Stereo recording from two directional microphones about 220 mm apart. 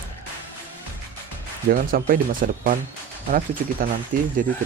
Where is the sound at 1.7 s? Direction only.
40° right (ahead or behind).